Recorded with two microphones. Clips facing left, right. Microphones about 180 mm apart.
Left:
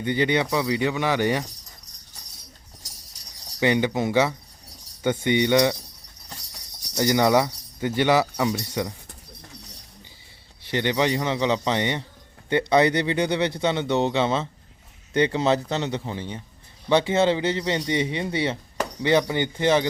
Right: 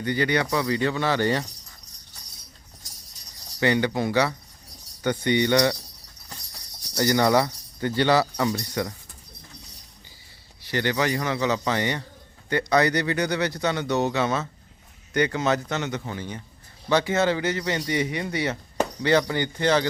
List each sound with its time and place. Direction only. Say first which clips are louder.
0.0 s speech: left 1 dB; 20° left (ahead or behind)
3.6 s speech: left 1 dB; 15° left (ahead or behind)
6.9 s speech: left 1 dB; 15° left (ahead or behind)
10.7 s speech: left 2 dB; 20° left (ahead or behind)